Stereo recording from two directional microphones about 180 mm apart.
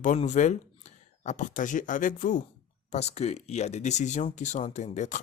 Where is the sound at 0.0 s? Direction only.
40° left (ahead or behind).